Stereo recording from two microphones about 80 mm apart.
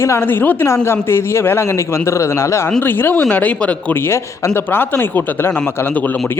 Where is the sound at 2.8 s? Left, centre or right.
Left.